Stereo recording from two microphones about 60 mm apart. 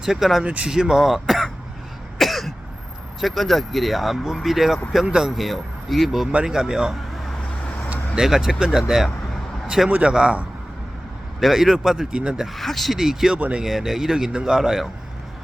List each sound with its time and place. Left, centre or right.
0.0 s a man's voice: centre
0.4 s speech: right
0.7 s speech: centre
2.1 s cough: centre
3.2 s a man's voice: centre
6.3 s a man's voice: centre
11.3 s speech: centre
12.5 s a man's voice: centre